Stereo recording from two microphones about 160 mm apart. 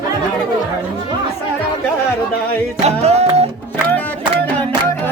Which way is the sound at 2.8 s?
40° right (ahead or behind).